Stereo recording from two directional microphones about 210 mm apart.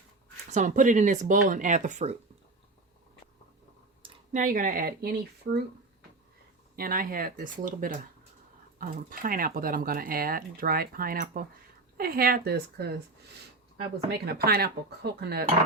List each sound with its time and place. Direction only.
0.5 s speech: 35° right (ahead or behind)
4.0 s speech: 35° right (ahead or behind)
5.5 s speech: 60° right (ahead or behind)
6.7 s speech: 45° right (ahead or behind)
14.1 s speech: 50° right (ahead or behind)